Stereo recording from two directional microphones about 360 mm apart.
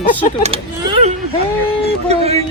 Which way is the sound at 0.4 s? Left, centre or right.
Centre.